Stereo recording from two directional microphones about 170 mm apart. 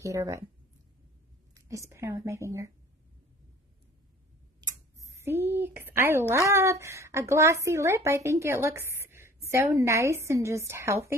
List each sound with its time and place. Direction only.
0.0 s a woman's voice: 20° right (ahead or behind)
1.5 s speech: 20° right (ahead or behind)
4.6 s a sound: 15° right (ahead or behind)
6.3 s a woman's voice: 15° right (ahead or behind)